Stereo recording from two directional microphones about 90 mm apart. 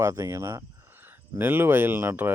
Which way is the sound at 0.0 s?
35° right (ahead or behind).